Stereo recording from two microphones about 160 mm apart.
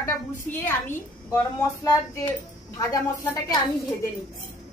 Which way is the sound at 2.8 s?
20° left (ahead or behind).